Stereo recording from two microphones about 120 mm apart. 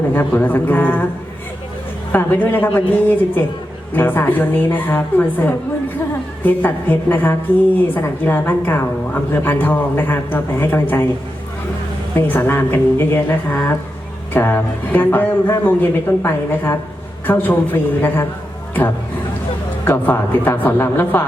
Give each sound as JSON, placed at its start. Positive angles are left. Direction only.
{"t": 0.1, "sound": "a woman's voice", "side_deg": 15}
{"t": 2.1, "sound": "a woman's voice", "side_deg": 15}
{"t": 12.1, "sound": "a woman's voice", "side_deg": 15}
{"t": 19.9, "sound": "a woman's voice", "side_deg": 15}